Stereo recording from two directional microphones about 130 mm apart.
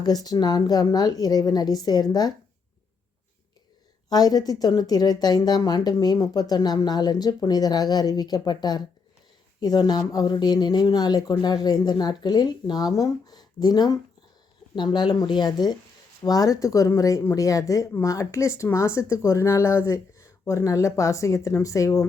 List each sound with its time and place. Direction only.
0.0 s speech: 30° left (ahead or behind)
4.1 s speech: 30° left (ahead or behind)